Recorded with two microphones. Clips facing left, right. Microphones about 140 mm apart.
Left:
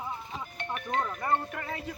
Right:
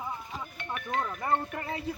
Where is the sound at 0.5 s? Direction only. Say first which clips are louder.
Left 1 dB; 30° left (ahead or behind).